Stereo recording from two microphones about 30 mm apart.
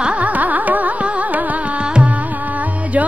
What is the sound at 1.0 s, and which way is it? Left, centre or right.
Music, right.